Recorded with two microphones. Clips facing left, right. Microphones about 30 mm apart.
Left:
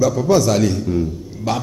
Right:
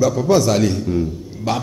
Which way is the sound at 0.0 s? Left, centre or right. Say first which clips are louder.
Even; right.